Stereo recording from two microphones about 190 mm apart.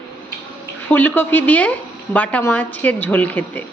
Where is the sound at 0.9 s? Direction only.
10° left (ahead or behind).